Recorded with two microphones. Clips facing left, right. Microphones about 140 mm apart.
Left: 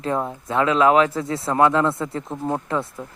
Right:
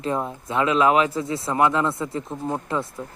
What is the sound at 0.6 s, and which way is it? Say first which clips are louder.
Speech: left 2 dB; 20° right (ahead or behind).